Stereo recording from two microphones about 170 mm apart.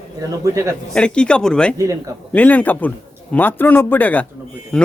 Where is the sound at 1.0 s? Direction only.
5° left (ahead or behind).